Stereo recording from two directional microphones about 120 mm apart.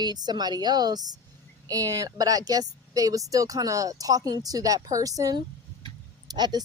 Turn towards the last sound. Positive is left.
turn(degrees=-35)  # may be behind; listen again after turning